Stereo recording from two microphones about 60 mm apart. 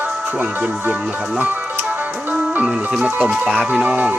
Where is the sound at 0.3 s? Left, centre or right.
Right.